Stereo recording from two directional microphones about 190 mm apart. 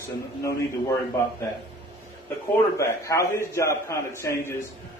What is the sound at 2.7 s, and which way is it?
A man's voice, 15° left (ahead or behind).